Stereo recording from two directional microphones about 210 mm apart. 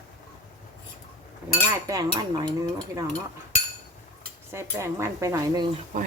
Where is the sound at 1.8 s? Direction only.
15° right (ahead or behind).